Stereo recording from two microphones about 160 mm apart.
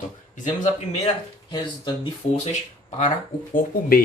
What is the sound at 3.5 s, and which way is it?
Speech, 65° left (ahead or behind).